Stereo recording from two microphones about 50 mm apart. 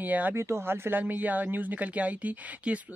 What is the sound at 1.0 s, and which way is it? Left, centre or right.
Speech, right.